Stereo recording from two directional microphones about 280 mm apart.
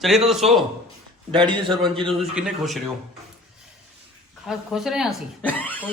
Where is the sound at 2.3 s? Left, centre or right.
Centre.